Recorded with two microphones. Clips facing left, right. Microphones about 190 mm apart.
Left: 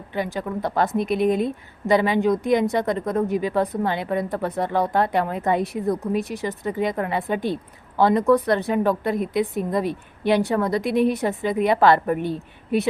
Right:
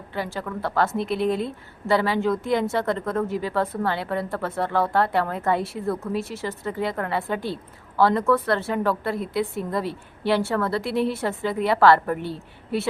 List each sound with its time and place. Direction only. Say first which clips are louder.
0.1 s a woman's voice: left 3 dB; 15° left (ahead or behind)